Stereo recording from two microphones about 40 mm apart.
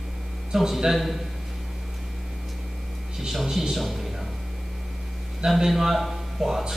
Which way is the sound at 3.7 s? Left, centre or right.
Centre.